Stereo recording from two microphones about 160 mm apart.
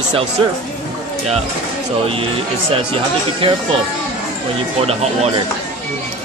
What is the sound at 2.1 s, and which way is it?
Speech, 35° right (ahead or behind).